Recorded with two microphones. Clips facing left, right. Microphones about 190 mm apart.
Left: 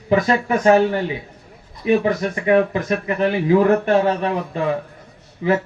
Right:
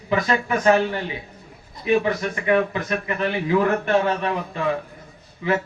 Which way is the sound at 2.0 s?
35° left (ahead or behind).